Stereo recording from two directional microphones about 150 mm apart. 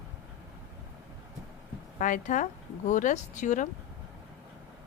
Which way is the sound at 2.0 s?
60° left (ahead or behind).